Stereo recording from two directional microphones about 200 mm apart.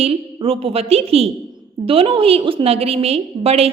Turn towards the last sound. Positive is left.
turn(degrees=-30)  # may be behind; listen again after turning